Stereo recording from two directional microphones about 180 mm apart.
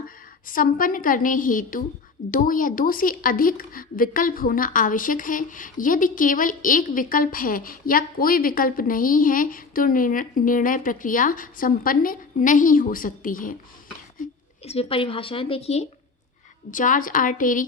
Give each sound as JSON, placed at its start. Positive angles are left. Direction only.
{"t": 0.4, "sound": "a woman's voice", "side_deg": 50}
{"t": 14.6, "sound": "speech", "side_deg": 35}
{"t": 16.7, "sound": "a woman's voice", "side_deg": 45}